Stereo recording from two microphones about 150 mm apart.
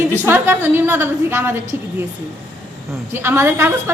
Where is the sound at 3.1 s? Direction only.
15° right (ahead or behind).